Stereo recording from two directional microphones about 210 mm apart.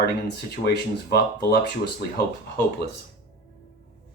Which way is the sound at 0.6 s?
50° left (ahead or behind).